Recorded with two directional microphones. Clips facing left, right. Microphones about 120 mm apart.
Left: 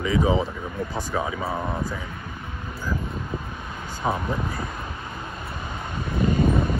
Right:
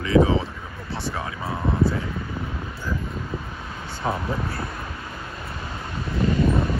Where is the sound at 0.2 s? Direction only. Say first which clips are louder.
Right 6 dB; 45° right (ahead or behind).